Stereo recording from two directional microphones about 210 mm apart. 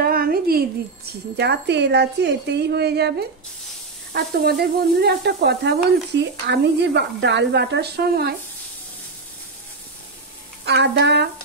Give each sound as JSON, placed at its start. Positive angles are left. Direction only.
{"t": 0.0, "sound": "speech", "side_deg": -45}
{"t": 10.6, "sound": "speech", "side_deg": -55}